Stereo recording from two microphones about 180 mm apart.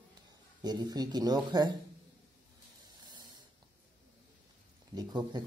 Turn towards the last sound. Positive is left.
turn(degrees=-20)  # may be behind; listen again after turning